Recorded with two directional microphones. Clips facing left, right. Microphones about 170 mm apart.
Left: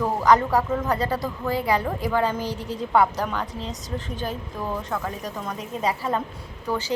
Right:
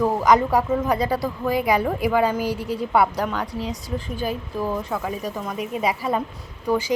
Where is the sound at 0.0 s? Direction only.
10° right (ahead or behind).